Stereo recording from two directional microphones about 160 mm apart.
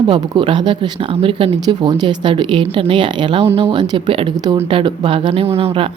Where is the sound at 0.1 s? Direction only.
30° right (ahead or behind).